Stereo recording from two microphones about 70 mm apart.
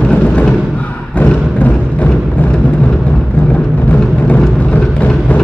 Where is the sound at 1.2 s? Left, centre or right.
Left.